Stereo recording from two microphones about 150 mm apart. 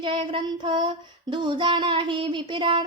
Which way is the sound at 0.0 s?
35° right (ahead or behind).